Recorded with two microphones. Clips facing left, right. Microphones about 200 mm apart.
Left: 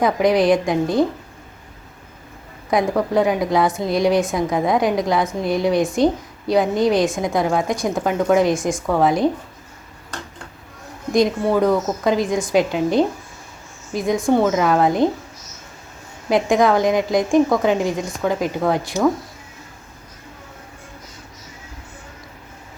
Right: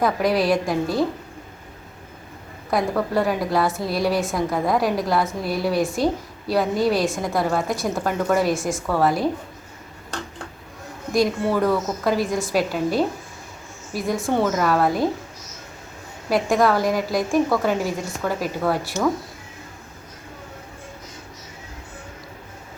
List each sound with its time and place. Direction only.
0.0 s a woman's voice: 20° left (ahead or behind)
2.6 s a woman's voice: 15° left (ahead or behind)
11.1 s a woman's voice: 15° left (ahead or behind)
16.6 s a woman's voice: 20° left (ahead or behind)